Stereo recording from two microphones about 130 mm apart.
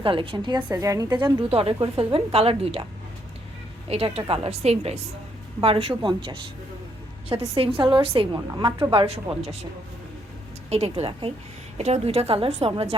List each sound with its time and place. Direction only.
0.0 s a woman's voice: 40° right (ahead or behind)
3.8 s a woman's voice: 45° right (ahead or behind)
7.5 s a woman's voice: 45° right (ahead or behind)
8.3 s a woman's voice: 35° right (ahead or behind); by 9.6 s 50° right (ahead or behind)
10.7 s a woman's voice: 50° right (ahead or behind)